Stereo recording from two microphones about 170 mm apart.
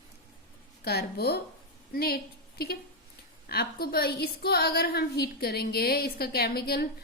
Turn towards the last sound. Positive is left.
turn(degrees=65)  # may be behind; listen again after turning